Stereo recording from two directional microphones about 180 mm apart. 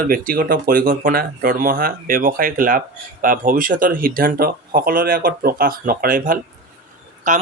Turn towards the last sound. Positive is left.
turn(degrees=-45)  # may be behind; listen again after turning